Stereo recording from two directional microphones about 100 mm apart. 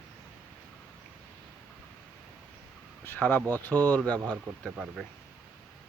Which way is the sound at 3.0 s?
20° left (ahead or behind).